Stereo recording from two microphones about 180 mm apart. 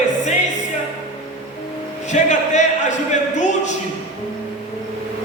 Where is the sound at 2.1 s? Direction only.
40° left (ahead or behind).